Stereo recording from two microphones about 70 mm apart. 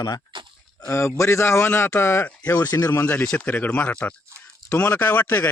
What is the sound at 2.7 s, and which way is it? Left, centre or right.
Speech, left.